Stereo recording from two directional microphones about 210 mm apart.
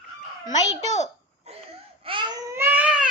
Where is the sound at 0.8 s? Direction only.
35° left (ahead or behind).